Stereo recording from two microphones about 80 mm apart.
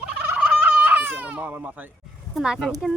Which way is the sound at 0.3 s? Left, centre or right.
Centre.